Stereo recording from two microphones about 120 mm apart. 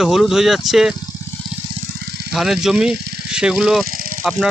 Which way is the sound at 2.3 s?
5° right (ahead or behind).